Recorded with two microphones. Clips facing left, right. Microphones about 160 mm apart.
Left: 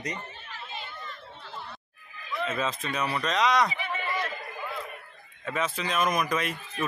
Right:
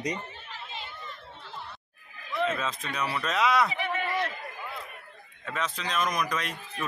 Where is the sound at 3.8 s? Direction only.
70° right (ahead or behind).